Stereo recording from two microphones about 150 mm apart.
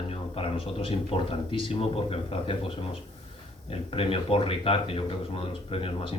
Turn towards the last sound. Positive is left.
turn(degrees=35)  # may be behind; listen again after turning